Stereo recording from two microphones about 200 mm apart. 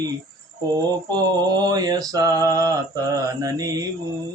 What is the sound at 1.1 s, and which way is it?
Mantra, 20° right (ahead or behind).